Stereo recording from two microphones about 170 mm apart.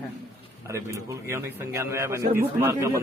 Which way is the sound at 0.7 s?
15° right (ahead or behind).